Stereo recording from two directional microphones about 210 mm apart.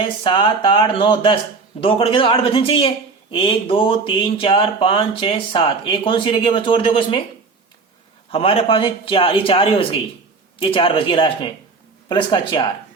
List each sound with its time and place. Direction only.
0.0 s speech: 20° left (ahead or behind)
8.3 s speech: 25° left (ahead or behind)